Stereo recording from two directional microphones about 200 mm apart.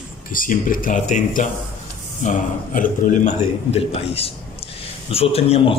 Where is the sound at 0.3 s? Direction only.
45° left (ahead or behind).